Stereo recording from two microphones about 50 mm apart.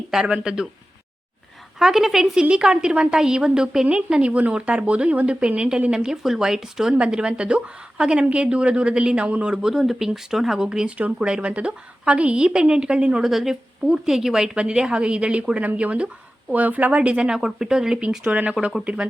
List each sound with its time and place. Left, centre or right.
0.1 s a woman's voice: centre
1.8 s a woman's voice: centre
6.9 s a woman's voice: centre
10.6 s a woman's voice: centre
13.2 s a woman's voice: centre; by 17.3 s right
17.3 s a woman's voice: centre
18.6 s a woman's voice: centre